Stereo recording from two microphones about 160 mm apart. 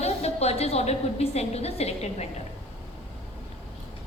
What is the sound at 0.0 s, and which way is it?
A woman's voice, 40° left (ahead or behind).